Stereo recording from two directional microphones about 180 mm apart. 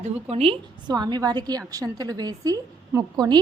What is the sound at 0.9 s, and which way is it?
A woman's voice, 25° right (ahead or behind).